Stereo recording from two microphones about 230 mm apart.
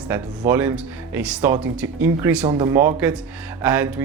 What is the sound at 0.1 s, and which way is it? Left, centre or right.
Speech, centre.